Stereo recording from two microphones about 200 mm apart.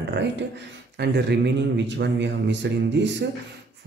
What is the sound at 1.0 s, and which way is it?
A man's voice, 55° right (ahead or behind).